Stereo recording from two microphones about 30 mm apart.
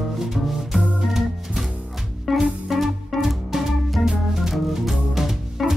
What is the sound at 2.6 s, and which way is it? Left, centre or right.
Organ, centre.